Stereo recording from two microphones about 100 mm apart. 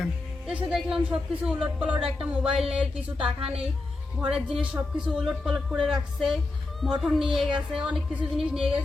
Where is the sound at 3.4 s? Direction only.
70° right (ahead or behind).